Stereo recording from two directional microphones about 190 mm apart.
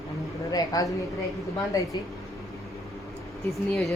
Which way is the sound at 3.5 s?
Centre (ahead or behind).